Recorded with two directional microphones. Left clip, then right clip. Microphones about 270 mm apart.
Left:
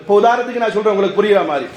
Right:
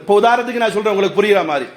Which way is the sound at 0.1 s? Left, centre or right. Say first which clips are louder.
Even; right.